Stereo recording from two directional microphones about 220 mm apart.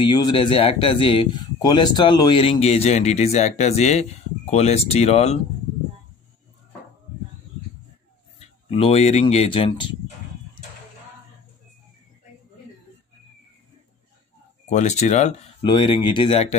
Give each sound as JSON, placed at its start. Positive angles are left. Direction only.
{"t": 0.0, "sound": "speech", "side_deg": 20}
{"t": 8.4, "sound": "speech", "side_deg": 25}
{"t": 14.7, "sound": "speech", "side_deg": 30}